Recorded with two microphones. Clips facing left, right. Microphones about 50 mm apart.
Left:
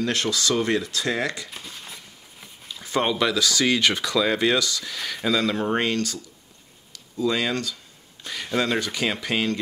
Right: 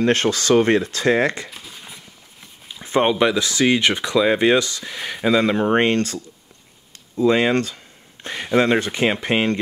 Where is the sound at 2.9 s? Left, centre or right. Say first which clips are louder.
Right 5 dB; right.